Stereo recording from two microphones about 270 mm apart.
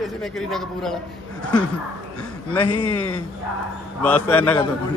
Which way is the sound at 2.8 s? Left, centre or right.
Left.